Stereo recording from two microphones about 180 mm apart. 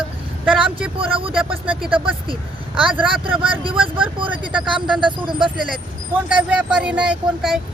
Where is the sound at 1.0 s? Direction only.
30° right (ahead or behind).